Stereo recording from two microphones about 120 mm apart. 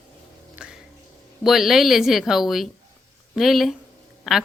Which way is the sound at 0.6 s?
5° right (ahead or behind).